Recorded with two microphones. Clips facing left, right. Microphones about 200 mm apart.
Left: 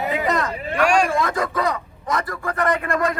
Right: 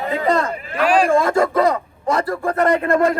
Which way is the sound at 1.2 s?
30° right (ahead or behind).